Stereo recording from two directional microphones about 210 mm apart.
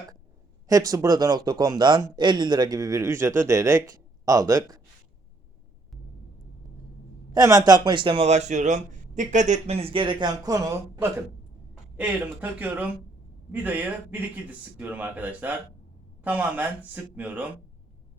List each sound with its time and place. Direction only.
0.7 s speech: 15° right (ahead or behind)
7.3 s speech: 15° right (ahead or behind)